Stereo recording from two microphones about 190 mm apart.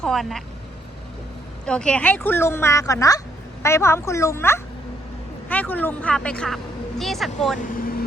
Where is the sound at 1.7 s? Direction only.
5° left (ahead or behind).